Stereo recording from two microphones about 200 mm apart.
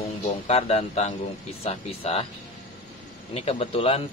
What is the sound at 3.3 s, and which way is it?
Speech, 30° left (ahead or behind).